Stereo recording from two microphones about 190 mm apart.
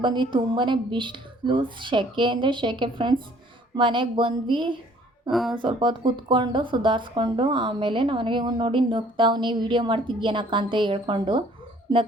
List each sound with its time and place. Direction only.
0.0 s speech: 25° right (ahead or behind)
5.3 s speech: centre (ahead or behind)
5.5 s speech: 25° right (ahead or behind)